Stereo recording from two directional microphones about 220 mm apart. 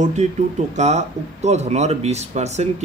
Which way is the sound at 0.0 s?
30° right (ahead or behind).